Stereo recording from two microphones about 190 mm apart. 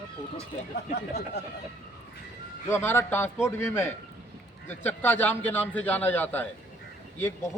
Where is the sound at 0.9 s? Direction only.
60° left (ahead or behind).